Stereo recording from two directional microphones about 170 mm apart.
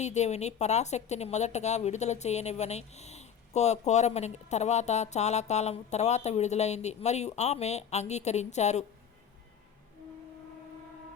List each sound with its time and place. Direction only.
0.0 s a woman's voice: 40° left (ahead or behind)